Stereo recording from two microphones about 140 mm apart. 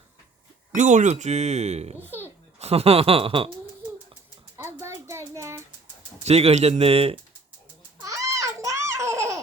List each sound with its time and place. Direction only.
0.7 s speech: 65° right (ahead or behind)
2.0 s speech: 15° right (ahead or behind)
2.6 s speech: 45° right (ahead or behind)
4.5 s a sound: 20° right (ahead or behind)
6.2 s speech: 50° right (ahead or behind)
7.9 s baby laughter: 20° right (ahead or behind)